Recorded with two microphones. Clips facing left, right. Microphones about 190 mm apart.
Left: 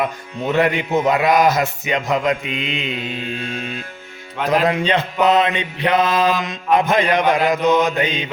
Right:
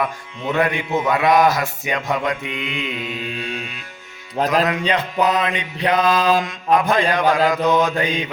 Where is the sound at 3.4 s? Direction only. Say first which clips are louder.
Left 1 dB; 45° left (ahead or behind).